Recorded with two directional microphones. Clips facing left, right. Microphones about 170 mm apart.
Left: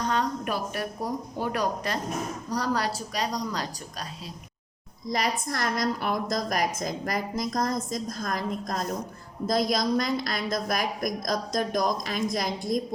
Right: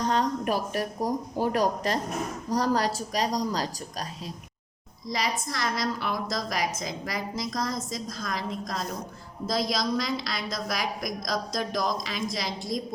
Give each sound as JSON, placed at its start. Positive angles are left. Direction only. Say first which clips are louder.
{"t": 0.1, "sound": "a woman's voice", "louder": "right 2 dB", "side_deg": -40}
{"t": 5.0, "sound": "a woman's voice", "louder": "left 2 dB", "side_deg": 55}